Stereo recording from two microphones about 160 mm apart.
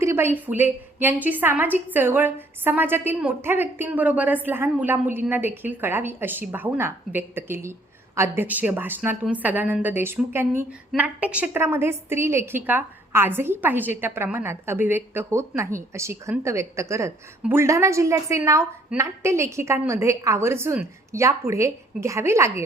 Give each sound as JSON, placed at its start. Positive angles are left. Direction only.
{"t": 0.0, "sound": "a woman's voice", "side_deg": -15}